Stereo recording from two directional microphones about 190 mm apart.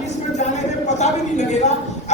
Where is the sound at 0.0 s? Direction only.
40° left (ahead or behind).